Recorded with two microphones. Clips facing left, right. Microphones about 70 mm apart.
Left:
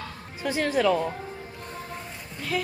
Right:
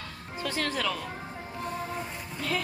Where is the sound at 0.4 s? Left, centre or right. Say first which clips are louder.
Left 7 dB; centre.